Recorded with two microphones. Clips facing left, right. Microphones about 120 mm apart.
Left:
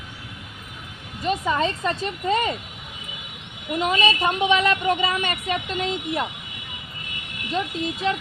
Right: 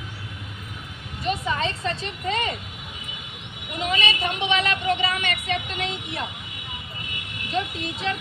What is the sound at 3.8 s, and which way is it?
A woman's voice, 45° left (ahead or behind).